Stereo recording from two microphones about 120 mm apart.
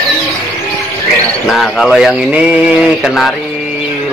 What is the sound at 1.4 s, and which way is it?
Speech, 5° left (ahead or behind).